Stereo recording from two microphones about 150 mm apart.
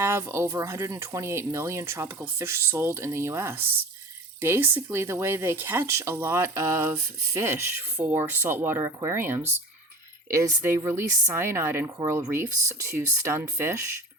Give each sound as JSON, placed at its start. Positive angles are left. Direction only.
{"t": 0.0, "sound": "speech", "side_deg": -15}